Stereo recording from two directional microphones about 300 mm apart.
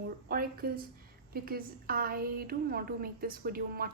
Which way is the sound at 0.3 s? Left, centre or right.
Right.